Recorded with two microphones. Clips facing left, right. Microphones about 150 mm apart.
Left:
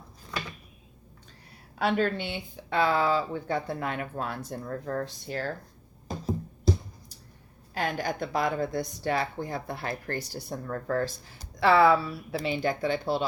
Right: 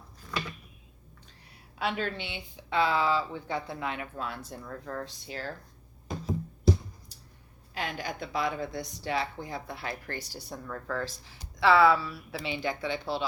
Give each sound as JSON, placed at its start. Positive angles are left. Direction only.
{"t": 1.8, "sound": "a woman's voice", "side_deg": 45}
{"t": 7.7, "sound": "a woman's voice", "side_deg": 45}